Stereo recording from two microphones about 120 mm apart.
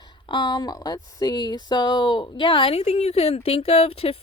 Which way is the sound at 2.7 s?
65° left (ahead or behind).